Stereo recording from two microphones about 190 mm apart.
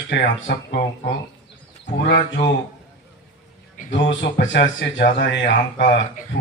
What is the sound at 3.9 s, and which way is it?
A man's voice, 70° left (ahead or behind).